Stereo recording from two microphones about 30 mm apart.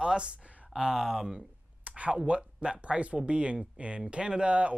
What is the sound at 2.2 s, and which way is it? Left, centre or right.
Speech, right.